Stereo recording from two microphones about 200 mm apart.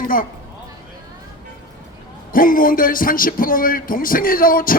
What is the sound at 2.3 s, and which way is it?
Speech, 45° left (ahead or behind).